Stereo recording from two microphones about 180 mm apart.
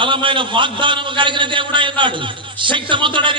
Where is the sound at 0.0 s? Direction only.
25° right (ahead or behind).